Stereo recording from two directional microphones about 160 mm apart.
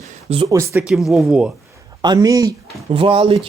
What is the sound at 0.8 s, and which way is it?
Speech, centre (ahead or behind).